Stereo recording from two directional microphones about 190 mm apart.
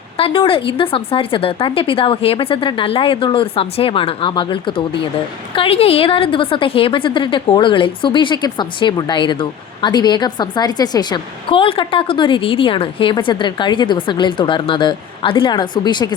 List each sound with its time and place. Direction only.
0.2 s a woman's voice: 30° left (ahead or behind)